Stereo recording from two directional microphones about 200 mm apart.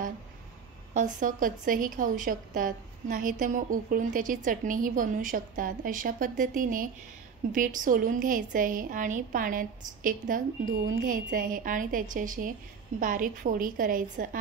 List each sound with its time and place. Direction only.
0.9 s a woman's voice: 40° right (ahead or behind)